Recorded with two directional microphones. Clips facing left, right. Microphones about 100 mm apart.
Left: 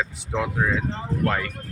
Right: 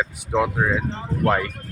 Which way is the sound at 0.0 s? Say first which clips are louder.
Right 5 dB; 20° right (ahead or behind).